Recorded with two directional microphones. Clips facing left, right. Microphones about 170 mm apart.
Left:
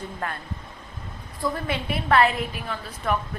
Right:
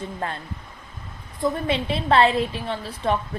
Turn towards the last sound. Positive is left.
turn(degrees=-30)  # may be behind; listen again after turning